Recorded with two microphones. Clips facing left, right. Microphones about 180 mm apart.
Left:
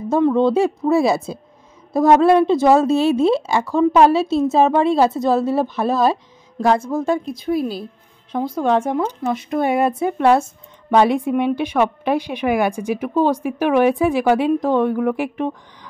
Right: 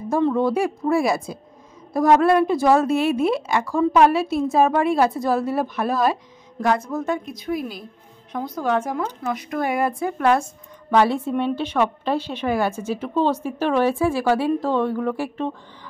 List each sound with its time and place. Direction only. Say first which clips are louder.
0.1 s a woman's voice: left 4 dB; 20° left (ahead or behind)